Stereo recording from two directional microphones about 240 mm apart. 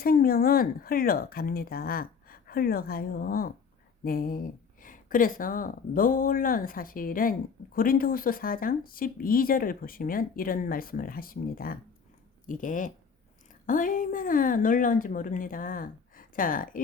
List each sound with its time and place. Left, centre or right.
0.0 s speech: left